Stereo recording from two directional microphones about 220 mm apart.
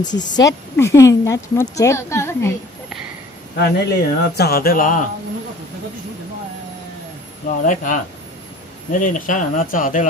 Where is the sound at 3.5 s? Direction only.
50° left (ahead or behind).